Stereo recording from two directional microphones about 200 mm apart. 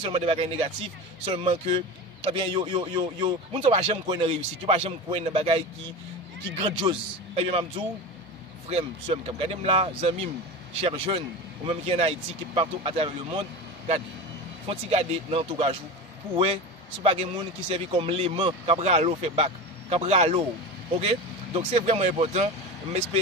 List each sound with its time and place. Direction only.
0.0 s speech: 30° right (ahead or behind)
6.6 s speech: 25° right (ahead or behind)
17.0 s speech: 30° right (ahead or behind)